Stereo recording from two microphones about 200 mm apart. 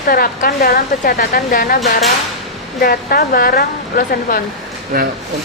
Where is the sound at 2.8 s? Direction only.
50° left (ahead or behind).